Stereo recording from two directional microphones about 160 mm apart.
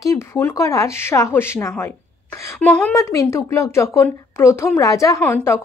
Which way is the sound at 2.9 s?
20° left (ahead or behind).